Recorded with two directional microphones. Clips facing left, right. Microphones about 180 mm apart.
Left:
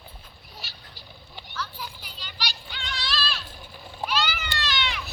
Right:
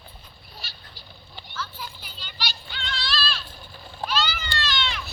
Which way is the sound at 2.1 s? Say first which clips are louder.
Right 1 dB; 10° left (ahead or behind).